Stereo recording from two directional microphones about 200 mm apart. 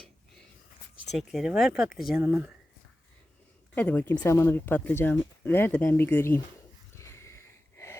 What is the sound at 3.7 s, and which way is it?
Speech, 5° left (ahead or behind).